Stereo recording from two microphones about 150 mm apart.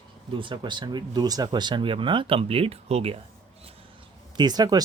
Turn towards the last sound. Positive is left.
turn(degrees=-25)  # may be behind; listen again after turning